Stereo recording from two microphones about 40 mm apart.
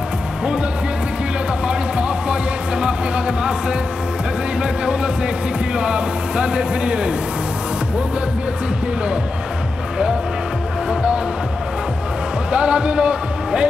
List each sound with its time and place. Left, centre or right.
1.7 s music: right
4.6 s speech: right
10.9 s speech: right
12.4 s speech: right